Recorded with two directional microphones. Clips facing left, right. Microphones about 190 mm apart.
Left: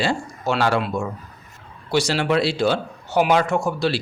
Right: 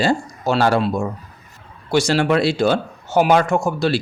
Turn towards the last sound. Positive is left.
turn(degrees=-45)  # may be behind; listen again after turning